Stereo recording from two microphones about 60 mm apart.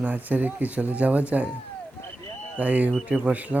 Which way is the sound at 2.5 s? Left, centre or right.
Right.